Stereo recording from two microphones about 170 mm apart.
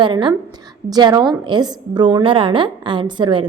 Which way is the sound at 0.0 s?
30° right (ahead or behind).